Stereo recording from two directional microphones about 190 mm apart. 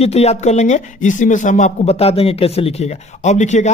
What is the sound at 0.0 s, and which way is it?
Speech, 35° left (ahead or behind).